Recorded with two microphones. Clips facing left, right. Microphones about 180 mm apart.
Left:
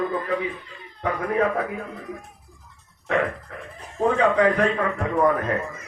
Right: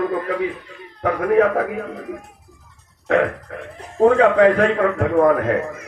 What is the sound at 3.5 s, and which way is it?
A man's voice, 70° right (ahead or behind).